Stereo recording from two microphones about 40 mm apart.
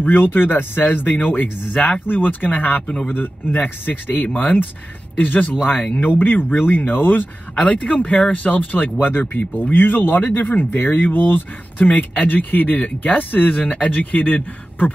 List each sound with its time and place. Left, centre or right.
0.0 s speech: left
4.4 s speech: left
7.6 s speech: left
11.8 s speech: left